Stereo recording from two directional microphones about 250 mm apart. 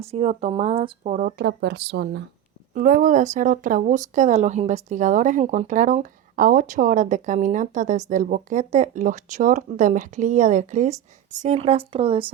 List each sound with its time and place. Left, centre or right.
0.0 s speech: right